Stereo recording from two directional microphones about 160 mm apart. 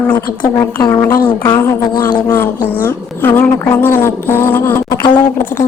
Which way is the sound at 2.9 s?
10° left (ahead or behind).